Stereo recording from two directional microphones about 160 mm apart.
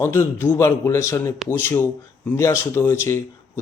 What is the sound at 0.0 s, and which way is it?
A man's voice, 15° left (ahead or behind).